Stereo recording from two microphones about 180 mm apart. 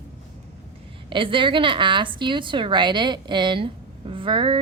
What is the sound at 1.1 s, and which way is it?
A woman's voice, 30° right (ahead or behind).